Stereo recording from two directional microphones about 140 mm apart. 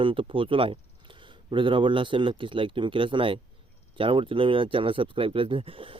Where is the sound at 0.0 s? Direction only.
40° right (ahead or behind).